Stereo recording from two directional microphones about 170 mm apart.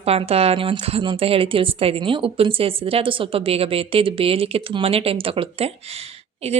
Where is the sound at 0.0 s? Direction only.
35° right (ahead or behind).